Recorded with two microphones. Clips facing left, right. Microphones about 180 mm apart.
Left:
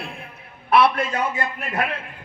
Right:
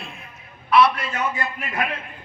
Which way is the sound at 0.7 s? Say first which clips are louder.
Even; 55° left (ahead or behind).